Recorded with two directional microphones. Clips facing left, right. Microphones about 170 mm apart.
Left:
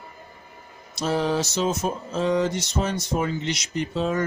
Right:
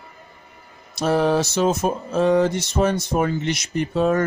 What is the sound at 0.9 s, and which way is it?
Speech, 60° right (ahead or behind).